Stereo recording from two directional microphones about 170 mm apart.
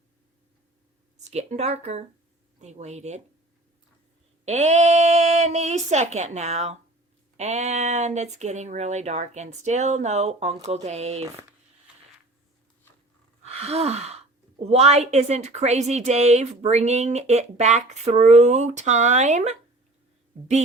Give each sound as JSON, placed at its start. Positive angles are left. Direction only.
{"t": 1.2, "sound": "a woman's voice", "side_deg": -40}
{"t": 4.4, "sound": "a woman's voice", "side_deg": -40}
{"t": 13.4, "sound": "gasp", "side_deg": -40}
{"t": 14.6, "sound": "a woman's voice", "side_deg": -40}